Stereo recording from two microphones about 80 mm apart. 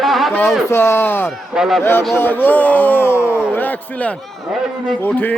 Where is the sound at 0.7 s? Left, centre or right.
Left.